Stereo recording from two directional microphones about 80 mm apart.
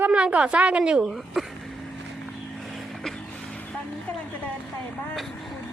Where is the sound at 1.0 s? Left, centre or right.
Centre.